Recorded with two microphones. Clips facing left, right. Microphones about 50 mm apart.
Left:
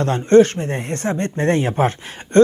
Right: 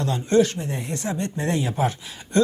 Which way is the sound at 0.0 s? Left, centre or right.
Left.